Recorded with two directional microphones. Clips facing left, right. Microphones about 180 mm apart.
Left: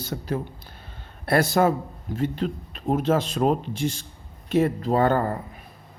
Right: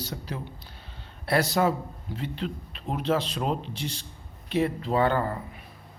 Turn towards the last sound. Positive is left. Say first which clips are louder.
# left 3 dB
turn(degrees=45)  # may be behind; listen again after turning